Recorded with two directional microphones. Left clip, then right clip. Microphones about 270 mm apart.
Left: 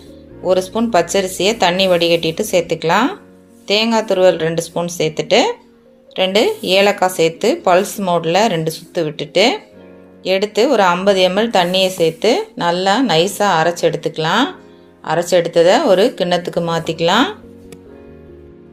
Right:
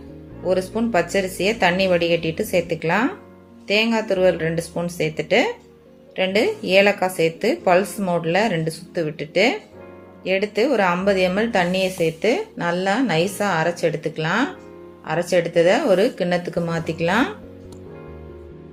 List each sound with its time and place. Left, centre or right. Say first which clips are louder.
0.4 s a woman's voice: left 6 dB; centre